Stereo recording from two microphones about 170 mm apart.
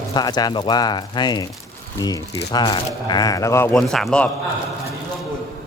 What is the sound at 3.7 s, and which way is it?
Speech, centre (ahead or behind).